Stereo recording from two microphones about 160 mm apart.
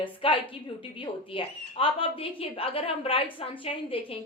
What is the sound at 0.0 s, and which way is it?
A woman's voice, 30° left (ahead or behind).